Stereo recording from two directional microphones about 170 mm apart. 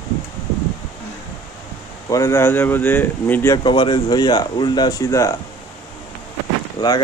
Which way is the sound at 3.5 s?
25° left (ahead or behind).